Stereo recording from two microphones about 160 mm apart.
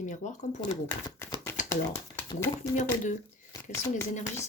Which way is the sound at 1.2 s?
15° left (ahead or behind).